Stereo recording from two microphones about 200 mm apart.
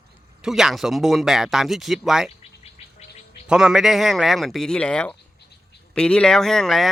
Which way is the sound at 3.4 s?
5° right (ahead or behind).